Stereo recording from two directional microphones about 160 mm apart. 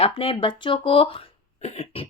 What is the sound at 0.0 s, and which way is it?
Speech, 35° left (ahead or behind).